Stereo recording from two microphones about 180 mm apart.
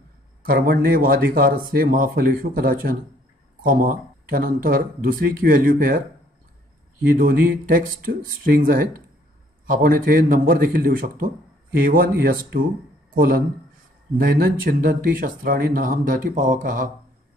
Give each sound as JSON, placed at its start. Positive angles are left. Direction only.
{"t": 0.4, "sound": "speech", "side_deg": -55}
{"t": 7.1, "sound": "a man's voice", "side_deg": -55}